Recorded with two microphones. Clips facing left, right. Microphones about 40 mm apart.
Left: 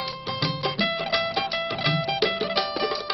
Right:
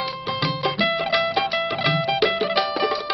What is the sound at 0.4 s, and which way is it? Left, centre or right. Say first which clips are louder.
Music: right 3 dB; centre.